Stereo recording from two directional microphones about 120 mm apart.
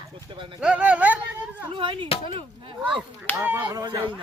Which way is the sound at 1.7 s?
45° right (ahead or behind).